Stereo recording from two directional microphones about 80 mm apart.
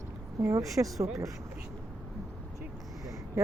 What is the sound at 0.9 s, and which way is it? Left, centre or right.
Speech, right.